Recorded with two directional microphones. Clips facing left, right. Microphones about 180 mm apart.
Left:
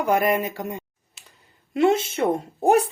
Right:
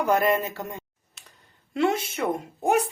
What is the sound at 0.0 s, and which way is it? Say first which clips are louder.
Speech: left 1 dB; 15° left (ahead or behind).